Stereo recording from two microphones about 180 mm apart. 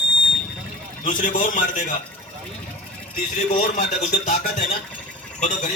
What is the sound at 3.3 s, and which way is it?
A man's voice, 45° left (ahead or behind).